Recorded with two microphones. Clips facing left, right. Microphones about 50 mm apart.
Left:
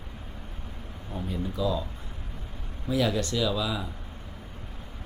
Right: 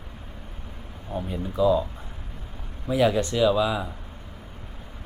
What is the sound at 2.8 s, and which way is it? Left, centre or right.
Speech, right.